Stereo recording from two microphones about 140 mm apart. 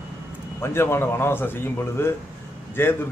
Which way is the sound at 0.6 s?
15° left (ahead or behind).